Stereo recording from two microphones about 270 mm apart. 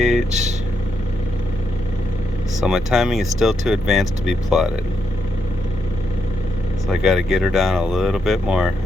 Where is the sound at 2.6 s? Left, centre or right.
Centre.